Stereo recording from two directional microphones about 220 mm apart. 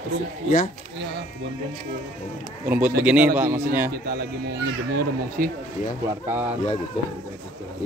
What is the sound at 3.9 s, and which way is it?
Speech, 45° right (ahead or behind).